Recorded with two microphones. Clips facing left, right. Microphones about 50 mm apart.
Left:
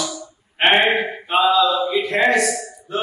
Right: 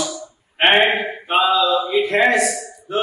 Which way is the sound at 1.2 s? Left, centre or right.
Centre.